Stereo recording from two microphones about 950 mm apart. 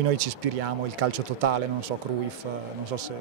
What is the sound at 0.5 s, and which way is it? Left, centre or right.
Speech, right.